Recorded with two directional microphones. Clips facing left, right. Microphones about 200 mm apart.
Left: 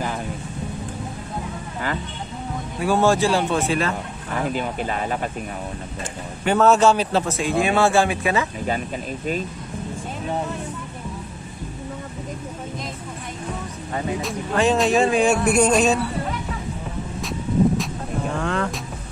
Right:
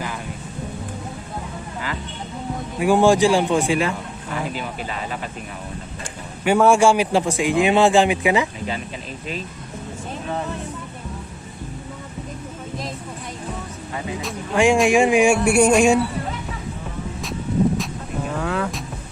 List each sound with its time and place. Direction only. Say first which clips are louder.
2.8 s a man's voice: right 3 dB; 15° right (ahead or behind)
4.5 s speech: left 4 dB; 45° left (ahead or behind)
6.4 s a man's voice: right 1 dB; 10° right (ahead or behind)
8.6 s speech: left 3 dB; 45° left (ahead or behind)
14.5 s a man's voice: right 3 dB; 10° right (ahead or behind)
17.2 s vehicle: left 1 dB; centre (ahead or behind)
18.3 s speech: right 1 dB; 5° right (ahead or behind)